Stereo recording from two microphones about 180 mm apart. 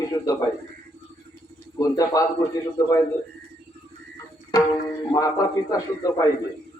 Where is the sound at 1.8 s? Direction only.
20° left (ahead or behind).